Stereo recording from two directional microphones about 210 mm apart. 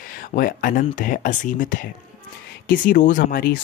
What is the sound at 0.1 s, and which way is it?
Speech, 40° left (ahead or behind).